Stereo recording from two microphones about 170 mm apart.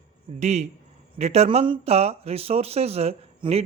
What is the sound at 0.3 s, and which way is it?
Speech, 40° right (ahead or behind).